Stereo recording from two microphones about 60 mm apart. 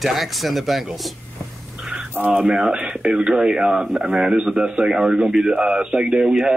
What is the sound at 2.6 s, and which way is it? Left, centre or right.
Speech, centre.